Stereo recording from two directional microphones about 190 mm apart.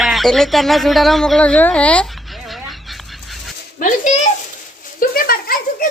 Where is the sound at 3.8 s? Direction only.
40° left (ahead or behind).